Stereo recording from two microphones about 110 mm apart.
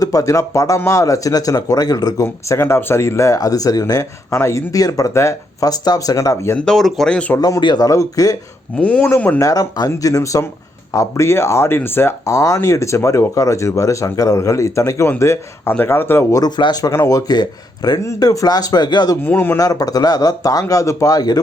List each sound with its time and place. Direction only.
0.0 s speech: 30° left (ahead or behind)
2.2 s speech: 25° left (ahead or behind)
6.7 s speech: centre (ahead or behind)
7.3 s speech: 30° left (ahead or behind)
7.6 s speech: 40° left (ahead or behind)
7.9 s speech: 30° left (ahead or behind)
8.8 s speech: 10° left (ahead or behind)
9.4 s speech: 30° left (ahead or behind)
16.3 s speech: 40° left (ahead or behind)
16.9 s speech: 30° left (ahead or behind)
19.2 s speech: 20° left (ahead or behind)
19.5 s speech: 35° left (ahead or behind)